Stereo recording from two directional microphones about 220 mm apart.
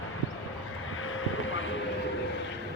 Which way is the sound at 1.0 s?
65° left (ahead or behind).